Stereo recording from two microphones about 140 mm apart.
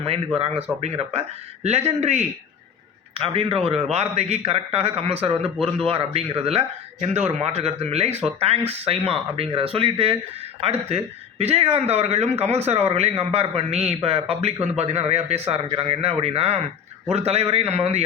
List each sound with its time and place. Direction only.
0.0 s a man's voice: 45° right (ahead or behind)